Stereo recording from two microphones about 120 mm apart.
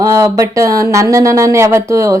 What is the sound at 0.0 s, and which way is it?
Speech, 25° right (ahead or behind).